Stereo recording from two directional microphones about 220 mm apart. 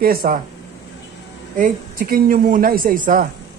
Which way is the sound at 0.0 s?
40° right (ahead or behind).